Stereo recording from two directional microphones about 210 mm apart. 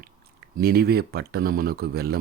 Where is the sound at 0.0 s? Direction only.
45° right (ahead or behind).